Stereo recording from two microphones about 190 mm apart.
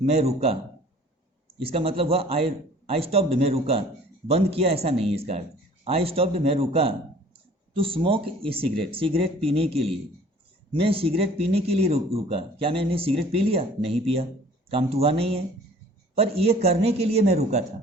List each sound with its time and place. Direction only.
0.1 s speech: 35° right (ahead or behind)
1.5 s speech: 30° right (ahead or behind)
10.8 s speech: 30° right (ahead or behind)